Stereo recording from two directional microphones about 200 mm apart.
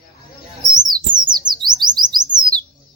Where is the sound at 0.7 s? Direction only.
20° right (ahead or behind).